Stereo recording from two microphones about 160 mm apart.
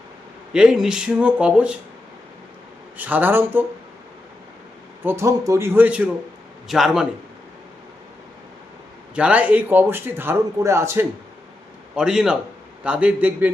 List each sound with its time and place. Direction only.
0.5 s speech: 5° right (ahead or behind)
3.0 s a man's voice: 10° right (ahead or behind)
5.0 s a man's voice: 20° right (ahead or behind)
9.1 s a man's voice: 10° right (ahead or behind)
11.9 s a man's voice: 5° right (ahead or behind)